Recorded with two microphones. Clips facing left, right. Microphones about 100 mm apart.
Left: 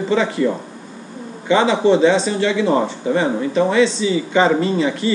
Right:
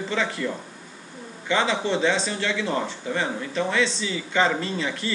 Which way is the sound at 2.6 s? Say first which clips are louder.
Left 9 dB; 20° left (ahead or behind).